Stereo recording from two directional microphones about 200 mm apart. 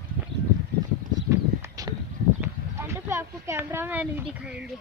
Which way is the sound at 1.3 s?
15° right (ahead or behind).